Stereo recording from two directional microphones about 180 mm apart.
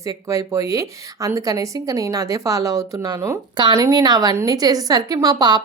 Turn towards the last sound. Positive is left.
turn(degrees=-20)  # may be behind; listen again after turning